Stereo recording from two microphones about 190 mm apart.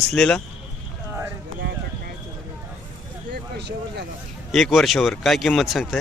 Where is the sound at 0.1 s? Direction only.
5° left (ahead or behind).